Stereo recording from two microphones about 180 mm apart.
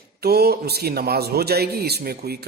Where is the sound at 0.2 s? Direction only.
60° right (ahead or behind).